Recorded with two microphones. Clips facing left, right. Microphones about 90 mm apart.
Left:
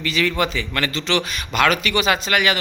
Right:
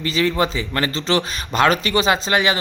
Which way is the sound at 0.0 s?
30° right (ahead or behind).